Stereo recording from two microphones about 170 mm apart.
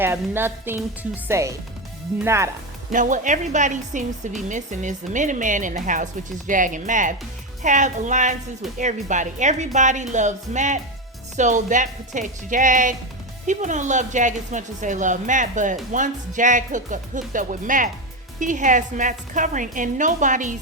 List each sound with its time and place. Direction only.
0.0 s music: 15° right (ahead or behind)
2.9 s a woman's voice: 50° right (ahead or behind)